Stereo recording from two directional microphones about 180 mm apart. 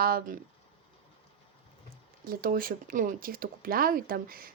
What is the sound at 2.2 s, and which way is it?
Speech, 55° right (ahead or behind).